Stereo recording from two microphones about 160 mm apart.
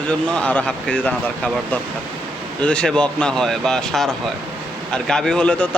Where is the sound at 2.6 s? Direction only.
5° left (ahead or behind).